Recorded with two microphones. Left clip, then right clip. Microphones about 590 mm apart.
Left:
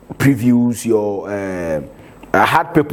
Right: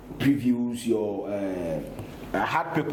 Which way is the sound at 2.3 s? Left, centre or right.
Left.